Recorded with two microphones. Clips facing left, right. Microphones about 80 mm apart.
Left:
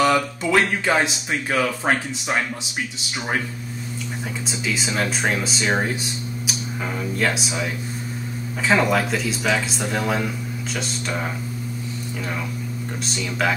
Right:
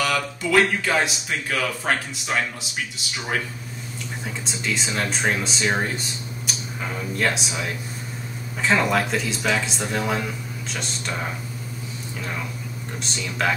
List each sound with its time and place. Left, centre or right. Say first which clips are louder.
0.0 s speech: left 5 dB; left
4.5 s speech: left 1 dB; centre
13.0 s speech: left 2 dB; centre